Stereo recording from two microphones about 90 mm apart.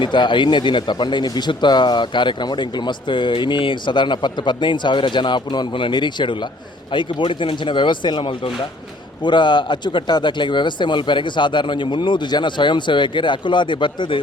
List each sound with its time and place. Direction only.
0.0 s speech: 60° left (ahead or behind)